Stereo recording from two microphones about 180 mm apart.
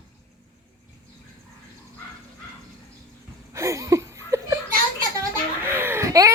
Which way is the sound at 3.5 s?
15° right (ahead or behind).